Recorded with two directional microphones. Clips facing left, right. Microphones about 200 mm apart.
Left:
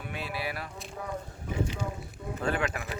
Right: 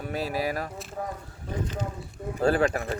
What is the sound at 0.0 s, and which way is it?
Speech, 40° right (ahead or behind).